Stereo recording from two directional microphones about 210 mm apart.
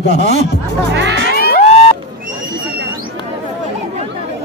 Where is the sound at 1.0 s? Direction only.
55° right (ahead or behind).